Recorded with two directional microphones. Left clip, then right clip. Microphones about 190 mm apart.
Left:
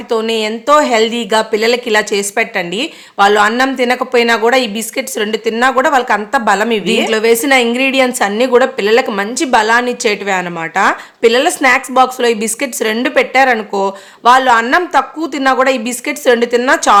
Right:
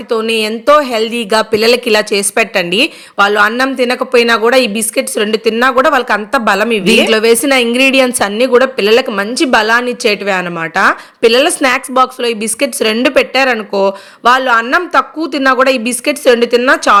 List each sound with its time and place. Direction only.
0.1 s a woman's voice: 10° right (ahead or behind)
6.8 s a woman's voice: 25° right (ahead or behind)